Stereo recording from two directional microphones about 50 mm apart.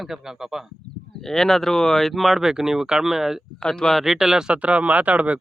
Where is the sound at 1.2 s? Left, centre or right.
Centre.